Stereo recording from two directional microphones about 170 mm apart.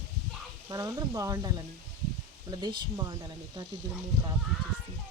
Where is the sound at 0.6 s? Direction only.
20° right (ahead or behind).